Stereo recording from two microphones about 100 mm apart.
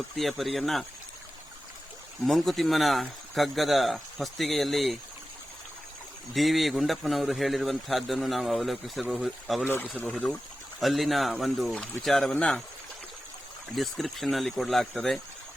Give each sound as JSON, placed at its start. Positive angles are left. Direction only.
{"t": 0.2, "sound": "a man's voice", "side_deg": 0}
{"t": 2.2, "sound": "a man's voice", "side_deg": 0}
{"t": 6.3, "sound": "a man's voice", "side_deg": 0}
{"t": 9.6, "sound": "speech", "side_deg": 20}
{"t": 10.0, "sound": "speech", "side_deg": 10}
{"t": 10.8, "sound": "a man's voice", "side_deg": 0}
{"t": 13.7, "sound": "a man's voice", "side_deg": 0}